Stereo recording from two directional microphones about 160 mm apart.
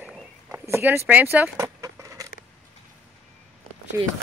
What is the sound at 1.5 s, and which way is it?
Chicken, 20° right (ahead or behind).